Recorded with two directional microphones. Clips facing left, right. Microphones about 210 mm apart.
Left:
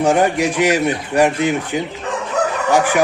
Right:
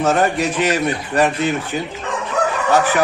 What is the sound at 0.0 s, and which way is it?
A man's voice, 10° left (ahead or behind).